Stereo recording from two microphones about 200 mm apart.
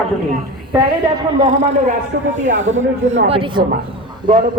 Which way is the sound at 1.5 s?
35° right (ahead or behind).